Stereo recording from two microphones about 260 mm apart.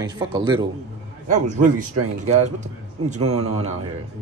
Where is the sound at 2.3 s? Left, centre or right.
Right.